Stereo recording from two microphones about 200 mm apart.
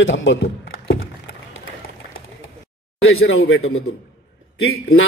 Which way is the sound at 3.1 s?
90° left.